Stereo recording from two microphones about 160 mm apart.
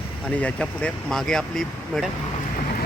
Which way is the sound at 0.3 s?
5° left (ahead or behind).